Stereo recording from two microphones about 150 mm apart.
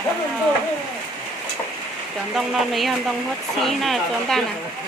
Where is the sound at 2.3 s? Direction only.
Centre (ahead or behind).